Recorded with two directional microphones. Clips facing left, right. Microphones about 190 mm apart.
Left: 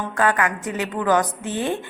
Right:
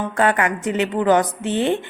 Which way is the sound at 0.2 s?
25° right (ahead or behind).